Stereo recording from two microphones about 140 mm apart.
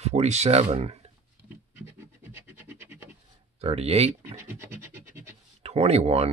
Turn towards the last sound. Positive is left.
turn(degrees=-50)  # may be behind; listen again after turning